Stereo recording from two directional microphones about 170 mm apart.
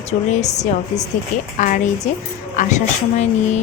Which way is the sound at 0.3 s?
45° left (ahead or behind).